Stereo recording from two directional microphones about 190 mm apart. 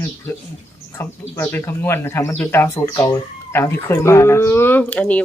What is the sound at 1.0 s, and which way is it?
Speech, 15° left (ahead or behind).